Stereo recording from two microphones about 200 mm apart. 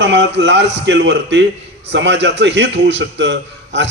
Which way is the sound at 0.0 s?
60° right (ahead or behind).